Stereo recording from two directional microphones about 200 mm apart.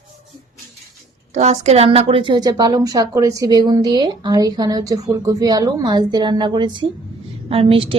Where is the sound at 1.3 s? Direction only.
35° right (ahead or behind).